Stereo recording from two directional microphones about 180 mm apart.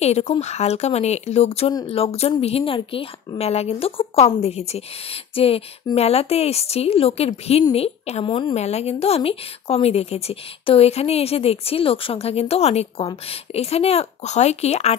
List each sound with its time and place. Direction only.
0.0 s speech: 35° left (ahead or behind)